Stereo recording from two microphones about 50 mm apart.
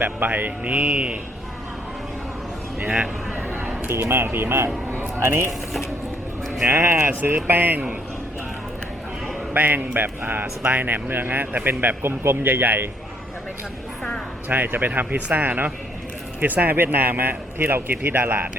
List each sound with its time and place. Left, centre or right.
0.0 s speech: right
2.7 s a man's voice: centre
3.3 s speech: right
4.9 s a sound: right
6.7 s a man's voice: right
9.5 s a man's voice: right
14.5 s speech: right